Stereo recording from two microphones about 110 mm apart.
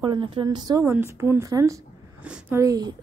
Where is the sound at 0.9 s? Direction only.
20° right (ahead or behind).